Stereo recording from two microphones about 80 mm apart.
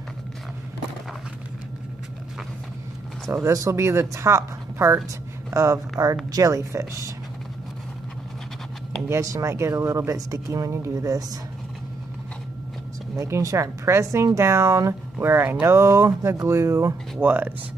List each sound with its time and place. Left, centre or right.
3.3 s speech: right
9.1 s speech: right
13.2 s speech: right
17.2 s speech: right